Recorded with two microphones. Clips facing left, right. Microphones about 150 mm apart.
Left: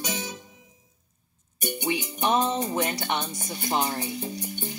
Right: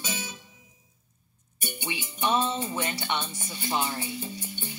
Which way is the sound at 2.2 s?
40° left (ahead or behind).